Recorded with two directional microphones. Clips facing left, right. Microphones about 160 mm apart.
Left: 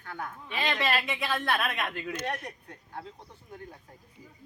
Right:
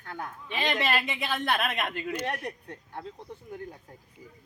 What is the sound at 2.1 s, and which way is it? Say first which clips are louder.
Speech: right 2 dB; 10° right (ahead or behind).